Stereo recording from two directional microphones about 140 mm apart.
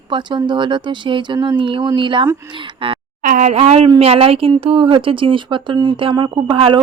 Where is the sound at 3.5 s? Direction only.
50° right (ahead or behind).